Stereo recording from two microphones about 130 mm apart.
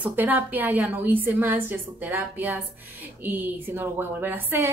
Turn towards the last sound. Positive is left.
turn(degrees=-15)  # may be behind; listen again after turning